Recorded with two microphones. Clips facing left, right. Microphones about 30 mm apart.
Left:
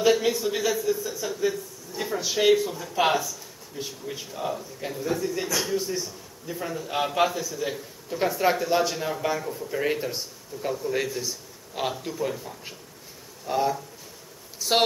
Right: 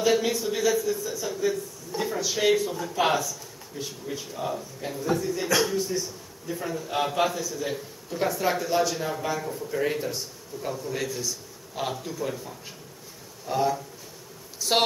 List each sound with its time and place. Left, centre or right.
0.1 s a man's voice: centre
9.4 s a man's voice: centre
9.8 s a man's voice: centre